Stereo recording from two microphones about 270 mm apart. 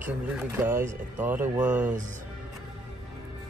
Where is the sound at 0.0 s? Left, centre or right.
Centre.